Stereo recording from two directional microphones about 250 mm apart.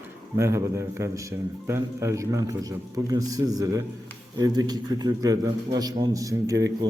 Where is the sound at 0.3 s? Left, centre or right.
Centre.